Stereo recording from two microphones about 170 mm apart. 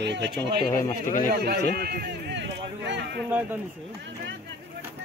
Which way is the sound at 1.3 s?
65° right (ahead or behind).